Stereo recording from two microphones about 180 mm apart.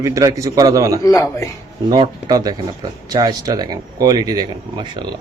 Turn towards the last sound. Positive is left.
turn(degrees=-20)  # may be behind; listen again after turning